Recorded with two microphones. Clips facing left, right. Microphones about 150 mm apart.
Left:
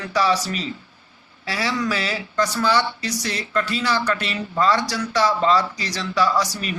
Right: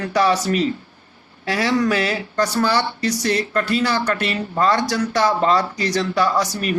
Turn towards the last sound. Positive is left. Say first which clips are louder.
# right 2 dB
turn(degrees=-50)  # may be behind; listen again after turning